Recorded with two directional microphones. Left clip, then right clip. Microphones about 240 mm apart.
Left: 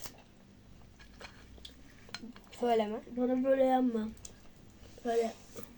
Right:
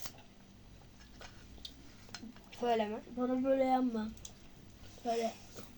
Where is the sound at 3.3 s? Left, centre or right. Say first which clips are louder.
Left 3 dB; centre.